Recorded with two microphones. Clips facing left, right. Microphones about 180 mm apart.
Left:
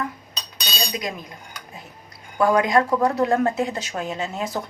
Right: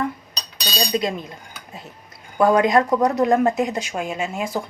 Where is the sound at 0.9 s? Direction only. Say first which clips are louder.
Right 8 dB; 35° right (ahead or behind).